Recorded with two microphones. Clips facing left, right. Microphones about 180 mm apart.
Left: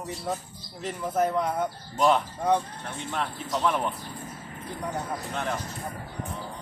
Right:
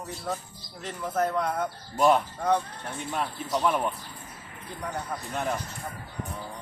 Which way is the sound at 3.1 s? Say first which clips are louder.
Right 1 dB; 10° right (ahead or behind).